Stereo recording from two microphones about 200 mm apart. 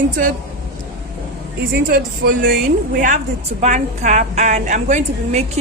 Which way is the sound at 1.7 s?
50° right (ahead or behind).